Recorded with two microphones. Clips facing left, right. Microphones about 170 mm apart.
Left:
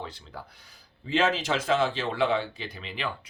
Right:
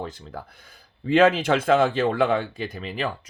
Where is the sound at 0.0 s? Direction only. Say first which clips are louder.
Right 6 dB; 45° right (ahead or behind).